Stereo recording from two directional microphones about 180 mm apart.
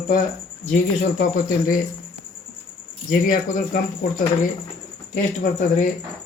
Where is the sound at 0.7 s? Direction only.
45° left (ahead or behind).